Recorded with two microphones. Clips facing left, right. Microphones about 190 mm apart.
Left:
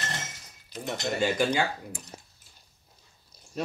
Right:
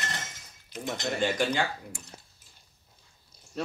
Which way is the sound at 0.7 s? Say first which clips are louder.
Right 1 dB; 35° left (ahead or behind).